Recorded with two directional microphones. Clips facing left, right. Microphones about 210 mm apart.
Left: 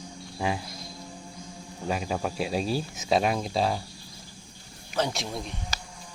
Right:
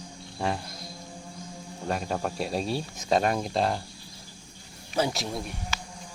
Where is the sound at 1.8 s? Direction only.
Centre (ahead or behind).